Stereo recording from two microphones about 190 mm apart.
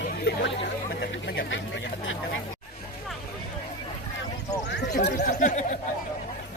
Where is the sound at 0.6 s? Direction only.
60° left (ahead or behind).